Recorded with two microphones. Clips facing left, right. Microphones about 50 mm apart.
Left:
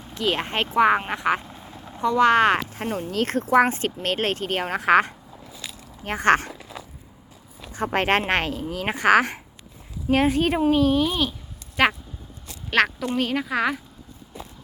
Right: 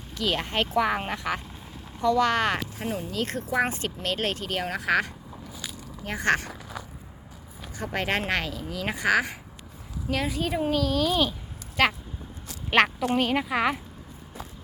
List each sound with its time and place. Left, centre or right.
0.1 s speech: left
1.4 s vehicle: centre
2.0 s speech: left
2.8 s speech: left
7.7 s a woman's voice: left
10.7 s speech: left
11.1 s speech: centre
12.7 s a woman's voice: centre